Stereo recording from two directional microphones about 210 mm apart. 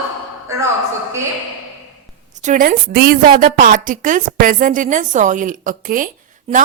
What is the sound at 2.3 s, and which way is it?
A woman's voice, 35° right (ahead or behind).